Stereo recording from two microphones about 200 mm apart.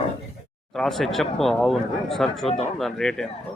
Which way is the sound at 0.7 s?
Centre (ahead or behind).